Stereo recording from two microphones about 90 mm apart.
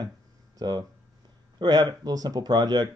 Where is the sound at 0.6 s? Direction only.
50° right (ahead or behind).